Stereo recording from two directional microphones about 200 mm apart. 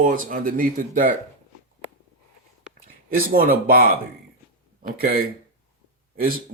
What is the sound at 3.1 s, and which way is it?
Speech, 45° right (ahead or behind).